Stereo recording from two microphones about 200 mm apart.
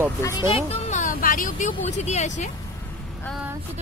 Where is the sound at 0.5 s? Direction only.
35° left (ahead or behind).